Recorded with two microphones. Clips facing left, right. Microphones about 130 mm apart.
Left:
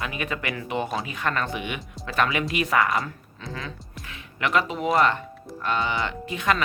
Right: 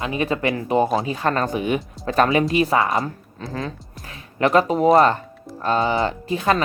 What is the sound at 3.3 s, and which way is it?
Speech, 40° right (ahead or behind).